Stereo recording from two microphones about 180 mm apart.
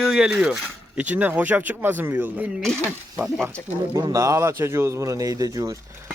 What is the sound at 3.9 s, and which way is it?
Speech, 20° right (ahead or behind).